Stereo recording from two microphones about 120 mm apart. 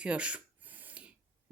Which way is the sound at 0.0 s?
10° right (ahead or behind).